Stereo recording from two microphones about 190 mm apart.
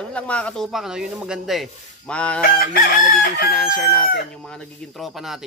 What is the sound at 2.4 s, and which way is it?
Chicken, 50° left (ahead or behind).